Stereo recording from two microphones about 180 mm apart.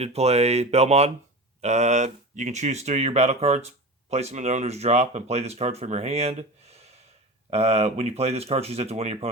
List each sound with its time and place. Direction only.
0.0 s speech: 35° right (ahead or behind)
7.5 s speech: 35° right (ahead or behind)